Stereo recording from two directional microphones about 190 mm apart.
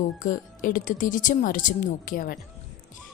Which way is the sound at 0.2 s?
45° left (ahead or behind).